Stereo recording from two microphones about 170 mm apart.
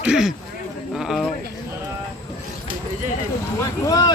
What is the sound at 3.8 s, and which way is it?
Speech, 20° left (ahead or behind).